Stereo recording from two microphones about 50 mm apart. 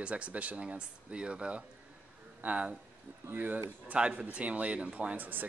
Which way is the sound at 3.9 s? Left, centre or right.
Right.